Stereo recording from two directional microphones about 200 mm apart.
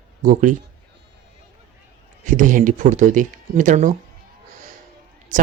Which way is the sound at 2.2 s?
40° right (ahead or behind).